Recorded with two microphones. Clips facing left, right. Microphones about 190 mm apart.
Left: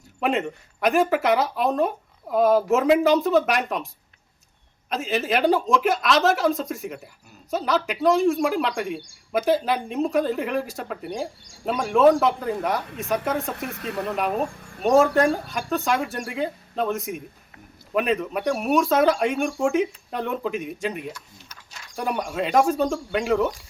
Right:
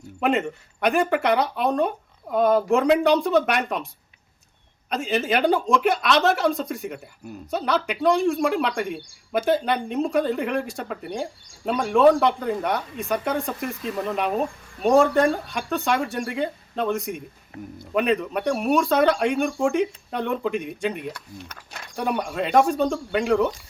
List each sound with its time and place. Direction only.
0.2 s speech: centre (ahead or behind)
4.9 s speech: centre (ahead or behind)
21.1 s speech: 60° right (ahead or behind)
21.9 s speech: centre (ahead or behind)